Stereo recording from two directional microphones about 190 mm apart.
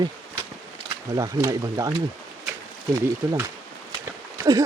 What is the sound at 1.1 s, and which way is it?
Speech, 20° right (ahead or behind).